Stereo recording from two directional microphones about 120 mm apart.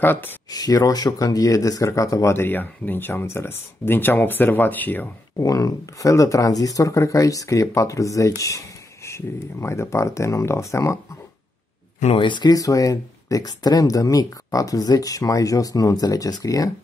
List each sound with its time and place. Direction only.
0.0 s speech: 15° left (ahead or behind)
0.5 s speech: 30° left (ahead or behind); by 5.1 s 15° left (ahead or behind)
5.4 s speech: 30° left (ahead or behind)
12.2 s speech: 40° left (ahead or behind)